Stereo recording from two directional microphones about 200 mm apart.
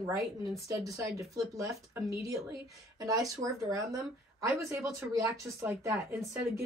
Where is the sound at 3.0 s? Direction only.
15° right (ahead or behind).